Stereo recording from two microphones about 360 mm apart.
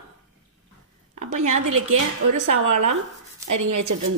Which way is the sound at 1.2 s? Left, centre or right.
Right.